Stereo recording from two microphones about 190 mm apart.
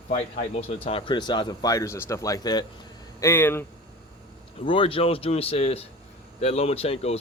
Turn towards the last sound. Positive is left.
turn(degrees=30)  # may be behind; listen again after turning